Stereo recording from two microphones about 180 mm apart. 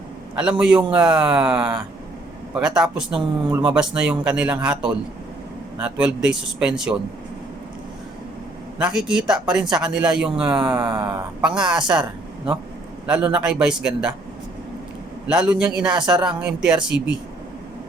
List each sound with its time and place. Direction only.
0.6 s a man's voice: 5° right (ahead or behind)
8.8 s speech: 5° right (ahead or behind)
13.1 s speech: 10° right (ahead or behind)
15.3 s speech: 5° right (ahead or behind)
16.0 s speech: 25° right (ahead or behind)
16.2 s a man's voice: 5° right (ahead or behind)